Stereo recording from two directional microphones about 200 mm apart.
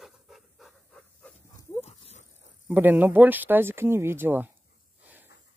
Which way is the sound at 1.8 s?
30° left (ahead or behind).